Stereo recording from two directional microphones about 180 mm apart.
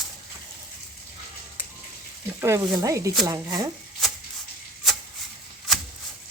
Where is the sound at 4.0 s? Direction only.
Centre (ahead or behind).